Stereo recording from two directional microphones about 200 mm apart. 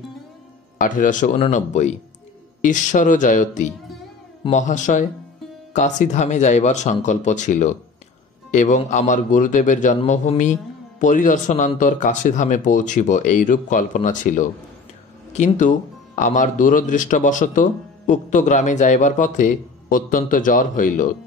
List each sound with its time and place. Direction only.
0.7 s speech: 40° left (ahead or behind)